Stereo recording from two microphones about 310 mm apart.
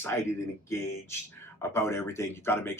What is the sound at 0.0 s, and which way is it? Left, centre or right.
Speech, centre.